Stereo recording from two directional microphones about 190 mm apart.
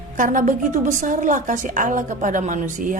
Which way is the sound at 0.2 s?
40° right (ahead or behind).